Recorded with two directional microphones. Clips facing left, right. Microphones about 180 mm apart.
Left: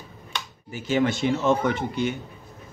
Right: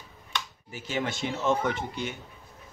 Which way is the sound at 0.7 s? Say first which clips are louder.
Left 9 dB; 60° left (ahead or behind).